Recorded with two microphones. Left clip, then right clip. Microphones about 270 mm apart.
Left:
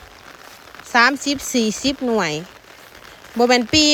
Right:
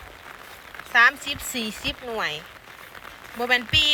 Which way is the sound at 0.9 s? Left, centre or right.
Left.